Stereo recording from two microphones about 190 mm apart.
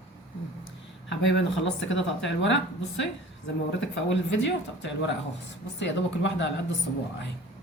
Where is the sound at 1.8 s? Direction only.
75° left (ahead or behind).